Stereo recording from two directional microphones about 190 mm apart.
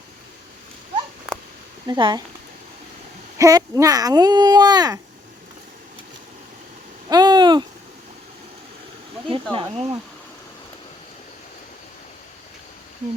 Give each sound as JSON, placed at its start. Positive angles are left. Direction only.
{"t": 1.9, "sound": "speech", "side_deg": -20}
{"t": 3.3, "sound": "speech", "side_deg": -15}
{"t": 7.1, "sound": "a sound", "side_deg": -20}
{"t": 9.3, "sound": "speech", "side_deg": -30}